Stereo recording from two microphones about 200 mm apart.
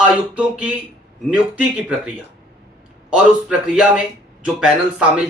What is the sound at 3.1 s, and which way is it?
Speech, 5° right (ahead or behind).